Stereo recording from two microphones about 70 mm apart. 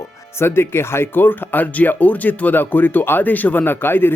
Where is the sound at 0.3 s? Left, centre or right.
Left.